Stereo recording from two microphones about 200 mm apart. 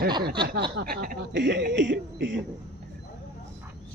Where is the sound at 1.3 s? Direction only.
60° right (ahead or behind).